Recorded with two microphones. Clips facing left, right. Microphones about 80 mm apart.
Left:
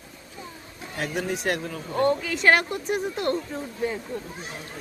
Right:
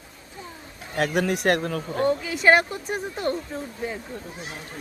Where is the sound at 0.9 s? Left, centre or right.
Right.